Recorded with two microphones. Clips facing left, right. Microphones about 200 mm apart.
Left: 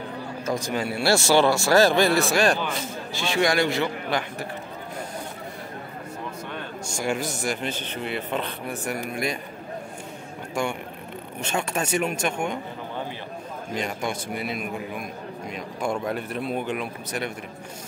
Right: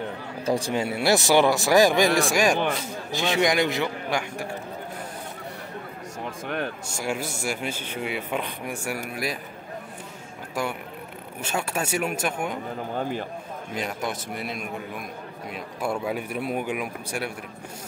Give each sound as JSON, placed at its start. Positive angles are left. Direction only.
{"t": 0.5, "sound": "speech", "side_deg": -30}
{"t": 7.0, "sound": "speech", "side_deg": -5}
{"t": 10.5, "sound": "a sound", "side_deg": -5}
{"t": 11.4, "sound": "speech", "side_deg": -5}
{"t": 13.7, "sound": "speech", "side_deg": -5}